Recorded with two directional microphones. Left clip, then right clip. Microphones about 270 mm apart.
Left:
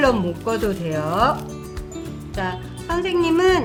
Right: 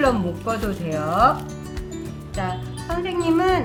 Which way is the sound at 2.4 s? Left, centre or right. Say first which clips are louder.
Left 1 dB; left.